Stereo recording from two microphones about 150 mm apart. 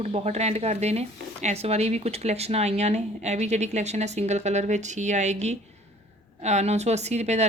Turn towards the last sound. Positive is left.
turn(degrees=-45)  # may be behind; listen again after turning